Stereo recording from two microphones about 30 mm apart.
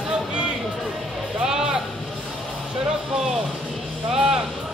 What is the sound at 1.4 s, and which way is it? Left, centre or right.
Vehicle, centre.